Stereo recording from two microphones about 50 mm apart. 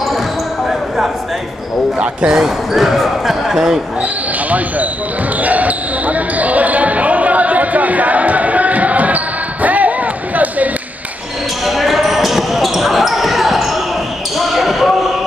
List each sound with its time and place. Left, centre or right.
0.7 s basketball bounce: centre
2.0 s speech: centre
2.7 s speech: centre
5.4 s basketball bounce: right
11.6 s basketball bounce: centre